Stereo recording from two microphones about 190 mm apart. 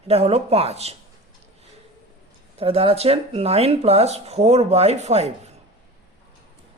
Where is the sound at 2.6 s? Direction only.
30° right (ahead or behind).